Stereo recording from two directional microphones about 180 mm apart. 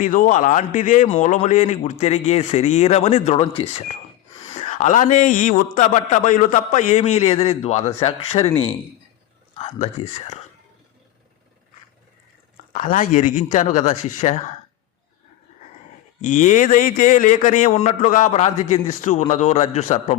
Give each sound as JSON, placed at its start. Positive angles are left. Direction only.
{"t": 0.0, "sound": "a man's voice", "side_deg": 45}
{"t": 12.7, "sound": "a man's voice", "side_deg": 45}
{"t": 16.2, "sound": "a man's voice", "side_deg": 45}